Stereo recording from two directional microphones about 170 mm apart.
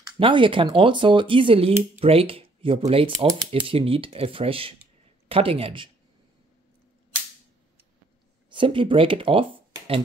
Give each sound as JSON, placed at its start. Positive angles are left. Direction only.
{"t": 0.2, "sound": "speech", "side_deg": -30}
{"t": 8.5, "sound": "speech", "side_deg": -30}